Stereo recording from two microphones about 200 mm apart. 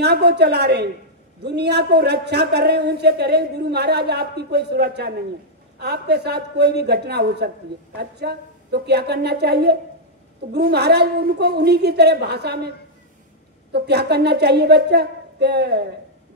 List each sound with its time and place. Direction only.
0.0 s a man's voice: 55° right (ahead or behind)